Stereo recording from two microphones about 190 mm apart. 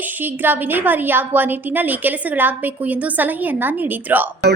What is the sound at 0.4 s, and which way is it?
A woman's voice, 10° right (ahead or behind).